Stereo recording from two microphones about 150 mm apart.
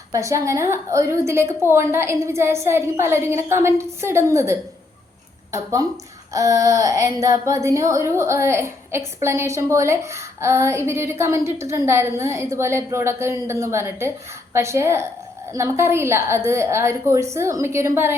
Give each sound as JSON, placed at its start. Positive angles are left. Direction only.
{"t": 0.1, "sound": "a woman's voice", "side_deg": -20}